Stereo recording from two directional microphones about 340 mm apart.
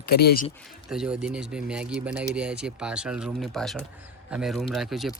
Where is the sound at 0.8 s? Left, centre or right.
Centre.